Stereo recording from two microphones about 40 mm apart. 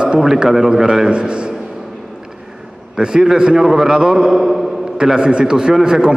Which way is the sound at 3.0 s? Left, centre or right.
Centre.